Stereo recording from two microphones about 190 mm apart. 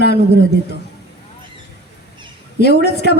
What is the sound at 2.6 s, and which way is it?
Speech, 60° left (ahead or behind).